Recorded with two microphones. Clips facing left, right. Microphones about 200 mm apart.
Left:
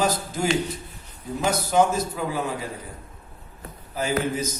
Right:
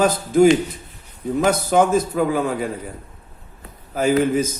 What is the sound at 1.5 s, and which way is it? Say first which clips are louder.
A man's voice: right 3 dB; 55° right (ahead or behind).